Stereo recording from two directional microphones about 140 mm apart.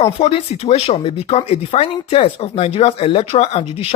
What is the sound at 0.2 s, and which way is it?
Speech, 45° left (ahead or behind).